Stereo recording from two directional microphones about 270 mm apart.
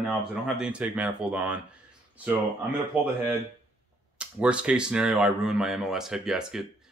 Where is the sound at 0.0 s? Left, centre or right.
Centre.